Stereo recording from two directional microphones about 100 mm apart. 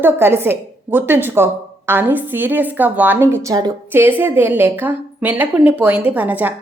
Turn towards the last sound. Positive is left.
turn(degrees=-15)  # may be behind; listen again after turning